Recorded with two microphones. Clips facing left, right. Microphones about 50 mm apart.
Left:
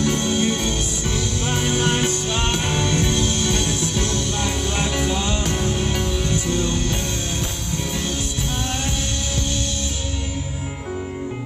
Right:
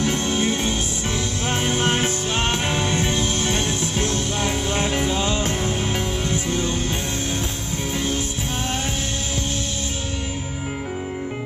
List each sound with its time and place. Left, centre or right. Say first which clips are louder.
0.0 s music: left 1 dB; right